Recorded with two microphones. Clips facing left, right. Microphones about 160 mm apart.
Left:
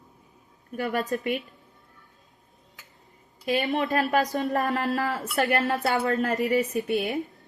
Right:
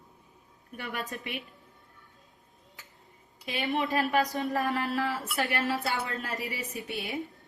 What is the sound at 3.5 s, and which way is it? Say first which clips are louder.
Speech: left 5 dB; 45° left (ahead or behind).